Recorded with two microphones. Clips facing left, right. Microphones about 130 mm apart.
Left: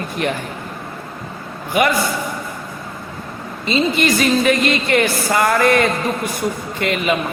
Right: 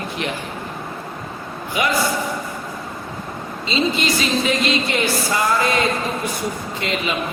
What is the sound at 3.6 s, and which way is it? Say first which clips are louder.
A man's voice: left 4 dB; 55° left (ahead or behind).